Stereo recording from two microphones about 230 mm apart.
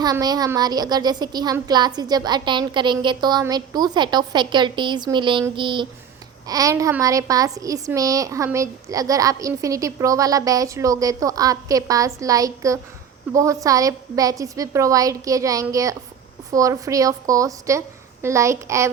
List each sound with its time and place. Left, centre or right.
0.0 s a woman's voice: centre